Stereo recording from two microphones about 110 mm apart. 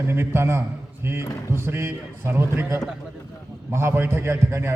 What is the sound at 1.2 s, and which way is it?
Speech, 30° left (ahead or behind).